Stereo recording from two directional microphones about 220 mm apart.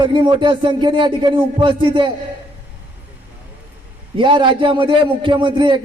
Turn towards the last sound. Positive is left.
turn(degrees=-20)  # may be behind; listen again after turning